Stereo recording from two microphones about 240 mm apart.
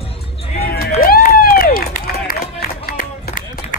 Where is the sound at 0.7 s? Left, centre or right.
Left.